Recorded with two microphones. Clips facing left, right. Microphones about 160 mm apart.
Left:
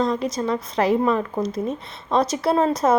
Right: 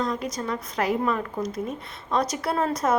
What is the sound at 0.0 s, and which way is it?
Speech, 30° left (ahead or behind).